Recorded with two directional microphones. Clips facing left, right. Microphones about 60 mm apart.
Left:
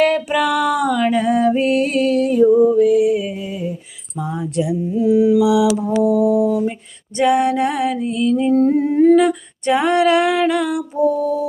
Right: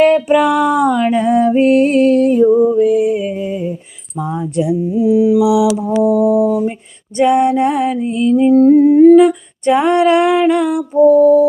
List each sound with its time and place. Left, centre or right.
0.0 s music: right
3.3 s a sound: right
4.2 s music: right
4.9 s mantra: centre
7.2 s music: right
8.5 s humming: centre
9.2 s a sound: right
10.5 s music: right